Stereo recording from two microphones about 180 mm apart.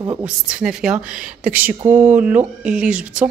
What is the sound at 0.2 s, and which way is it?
Speech, 5° right (ahead or behind).